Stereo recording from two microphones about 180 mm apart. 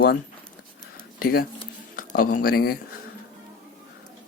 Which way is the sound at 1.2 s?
55° left (ahead or behind).